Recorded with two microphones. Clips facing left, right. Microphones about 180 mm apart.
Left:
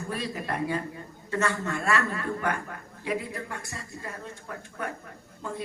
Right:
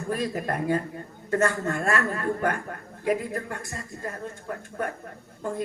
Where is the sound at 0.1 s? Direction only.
45° right (ahead or behind).